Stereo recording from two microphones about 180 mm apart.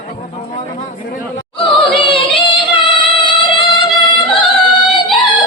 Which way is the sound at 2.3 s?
30° left (ahead or behind).